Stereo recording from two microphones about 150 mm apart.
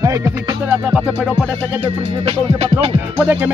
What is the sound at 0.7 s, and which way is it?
Music, 10° right (ahead or behind).